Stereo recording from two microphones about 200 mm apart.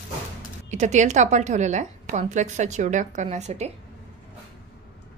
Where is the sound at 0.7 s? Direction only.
35° right (ahead or behind).